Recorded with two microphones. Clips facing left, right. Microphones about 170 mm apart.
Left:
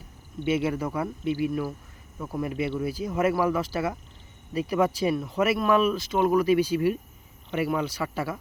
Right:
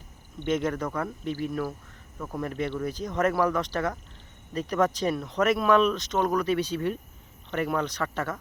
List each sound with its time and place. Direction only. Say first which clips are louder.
0.4 s speech: left 1 dB; 10° left (ahead or behind)